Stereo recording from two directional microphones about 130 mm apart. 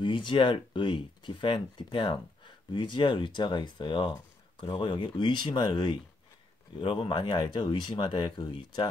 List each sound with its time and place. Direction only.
0.0 s speech: 40° left (ahead or behind)